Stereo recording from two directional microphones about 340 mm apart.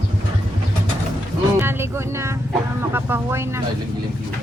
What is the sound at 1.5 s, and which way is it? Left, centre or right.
Music, centre.